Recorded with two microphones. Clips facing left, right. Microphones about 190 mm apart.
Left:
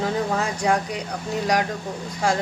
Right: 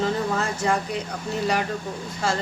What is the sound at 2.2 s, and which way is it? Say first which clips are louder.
Speech: left 3 dB; 15° left (ahead or behind).